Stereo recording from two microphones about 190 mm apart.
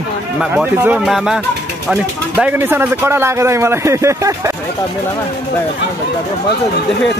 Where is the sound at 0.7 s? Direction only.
10° right (ahead or behind).